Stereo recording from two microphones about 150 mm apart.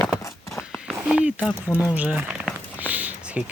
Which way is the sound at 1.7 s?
10° right (ahead or behind).